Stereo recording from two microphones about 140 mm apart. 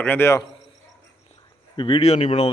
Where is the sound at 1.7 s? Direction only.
35° left (ahead or behind).